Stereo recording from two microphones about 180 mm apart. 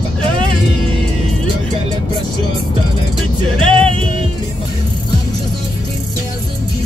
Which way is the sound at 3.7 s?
30° right (ahead or behind).